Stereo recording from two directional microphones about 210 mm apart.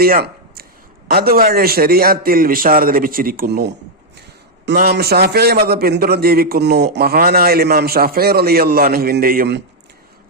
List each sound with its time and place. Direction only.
0.0 s a man's voice: 45° right (ahead or behind)